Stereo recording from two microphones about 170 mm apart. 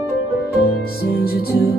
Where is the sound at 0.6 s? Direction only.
65° left (ahead or behind).